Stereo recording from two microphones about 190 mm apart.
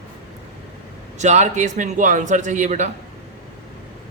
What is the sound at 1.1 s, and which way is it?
A man's voice, 40° right (ahead or behind).